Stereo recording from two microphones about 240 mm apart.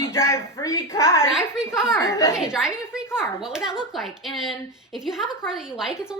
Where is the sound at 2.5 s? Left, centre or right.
Centre.